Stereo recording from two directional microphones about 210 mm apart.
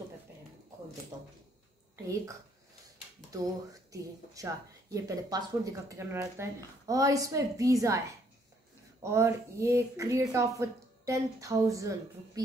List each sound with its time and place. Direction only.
1.1 s a sound: 20° right (ahead or behind)
3.3 s speech: 15° right (ahead or behind)
9.0 s speech: 15° right (ahead or behind)